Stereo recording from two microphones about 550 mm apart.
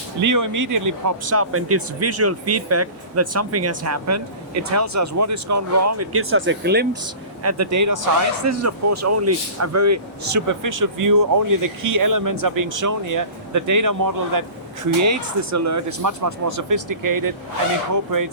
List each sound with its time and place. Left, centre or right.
0.2 s speech: right
7.4 s speech: right